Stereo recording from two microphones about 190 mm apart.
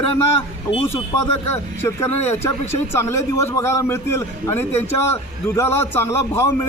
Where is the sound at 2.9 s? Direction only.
15° left (ahead or behind).